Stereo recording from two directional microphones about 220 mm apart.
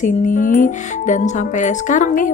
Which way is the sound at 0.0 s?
35° left (ahead or behind).